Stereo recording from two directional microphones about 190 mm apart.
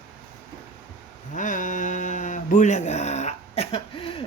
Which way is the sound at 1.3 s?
40° left (ahead or behind).